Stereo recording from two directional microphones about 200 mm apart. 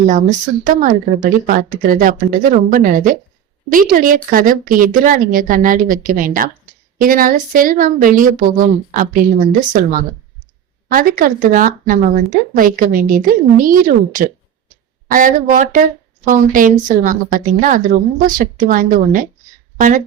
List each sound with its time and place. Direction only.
0.0 s speech: 40° right (ahead or behind)